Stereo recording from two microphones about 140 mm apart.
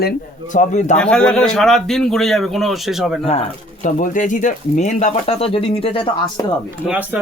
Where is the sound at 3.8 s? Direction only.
65° left (ahead or behind); by 6.4 s 40° left (ahead or behind).